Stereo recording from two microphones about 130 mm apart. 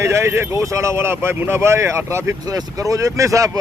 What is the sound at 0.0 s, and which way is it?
Speech, 20° right (ahead or behind).